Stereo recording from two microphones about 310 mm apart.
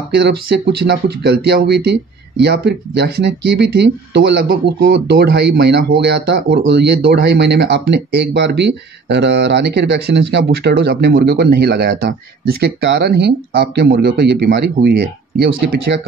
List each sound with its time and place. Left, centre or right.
0.1 s speech: right